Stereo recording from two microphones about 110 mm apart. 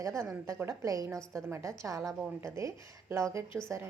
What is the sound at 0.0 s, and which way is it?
A woman's voice, 30° right (ahead or behind).